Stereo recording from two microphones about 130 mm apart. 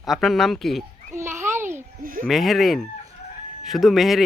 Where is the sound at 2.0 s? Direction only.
90° right.